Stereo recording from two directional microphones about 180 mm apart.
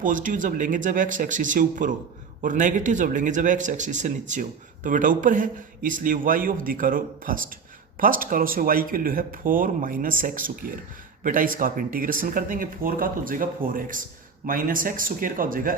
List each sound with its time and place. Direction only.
0.0 s speech: 45° right (ahead or behind)